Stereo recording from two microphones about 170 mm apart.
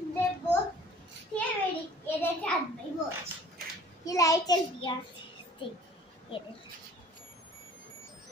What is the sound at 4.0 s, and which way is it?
Speech, 20° left (ahead or behind).